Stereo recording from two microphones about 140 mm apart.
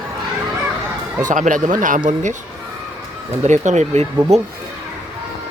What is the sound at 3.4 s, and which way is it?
Speech, 55° right (ahead or behind).